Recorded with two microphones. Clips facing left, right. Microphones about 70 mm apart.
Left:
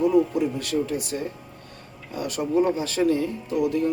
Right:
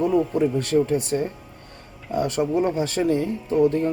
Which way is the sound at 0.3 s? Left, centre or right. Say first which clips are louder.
Right 4 dB; right.